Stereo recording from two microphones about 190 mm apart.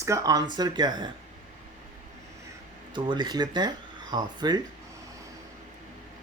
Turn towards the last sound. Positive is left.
turn(degrees=-20)  # may be behind; listen again after turning